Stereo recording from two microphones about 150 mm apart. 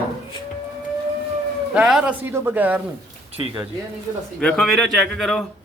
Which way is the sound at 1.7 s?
5° right (ahead or behind).